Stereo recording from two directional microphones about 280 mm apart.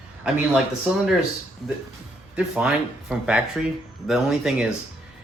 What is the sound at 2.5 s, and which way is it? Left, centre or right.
Speech, centre.